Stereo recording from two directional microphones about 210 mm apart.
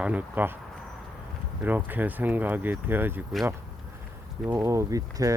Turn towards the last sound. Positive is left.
turn(degrees=-15)  # may be behind; listen again after turning